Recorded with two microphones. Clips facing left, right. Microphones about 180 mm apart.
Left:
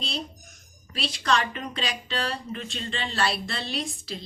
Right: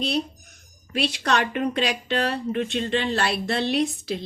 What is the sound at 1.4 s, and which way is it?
Speech, 50° right (ahead or behind).